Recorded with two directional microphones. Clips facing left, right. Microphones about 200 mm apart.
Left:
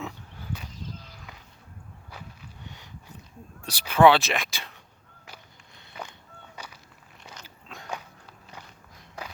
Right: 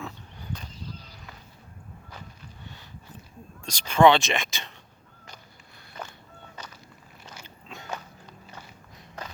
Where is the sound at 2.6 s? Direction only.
15° left (ahead or behind).